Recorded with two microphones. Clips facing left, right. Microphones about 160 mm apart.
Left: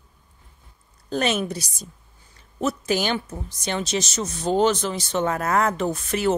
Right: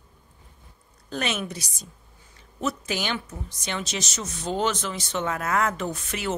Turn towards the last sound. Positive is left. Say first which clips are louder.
# left 7 dB
turn(degrees=40)  # may be behind; listen again after turning